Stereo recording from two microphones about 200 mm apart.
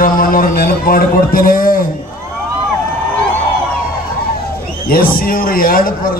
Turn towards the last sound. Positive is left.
turn(degrees=45)  # may be behind; listen again after turning